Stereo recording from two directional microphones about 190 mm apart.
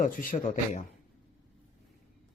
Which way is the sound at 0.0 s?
45° left (ahead or behind).